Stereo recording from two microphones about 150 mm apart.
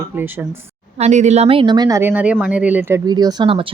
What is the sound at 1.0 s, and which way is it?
A woman's voice, 50° right (ahead or behind).